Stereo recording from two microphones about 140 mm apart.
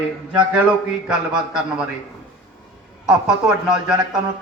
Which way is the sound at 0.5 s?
5° right (ahead or behind).